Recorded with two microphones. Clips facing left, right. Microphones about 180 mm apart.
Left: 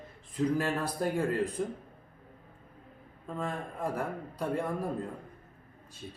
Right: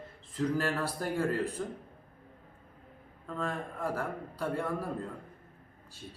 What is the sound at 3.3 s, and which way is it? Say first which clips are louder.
A man's voice: even; 15° left (ahead or behind).